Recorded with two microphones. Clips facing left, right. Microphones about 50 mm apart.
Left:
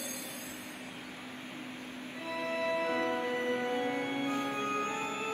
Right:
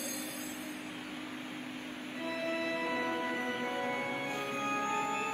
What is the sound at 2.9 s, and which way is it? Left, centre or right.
Music, left.